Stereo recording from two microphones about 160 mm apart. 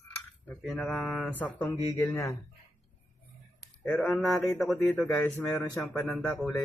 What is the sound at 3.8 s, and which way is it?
Speech, 5° left (ahead or behind).